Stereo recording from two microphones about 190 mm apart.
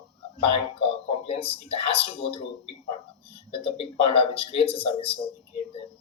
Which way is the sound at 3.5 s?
30° left (ahead or behind).